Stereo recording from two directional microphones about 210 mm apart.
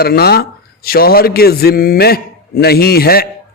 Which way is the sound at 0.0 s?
50° left (ahead or behind).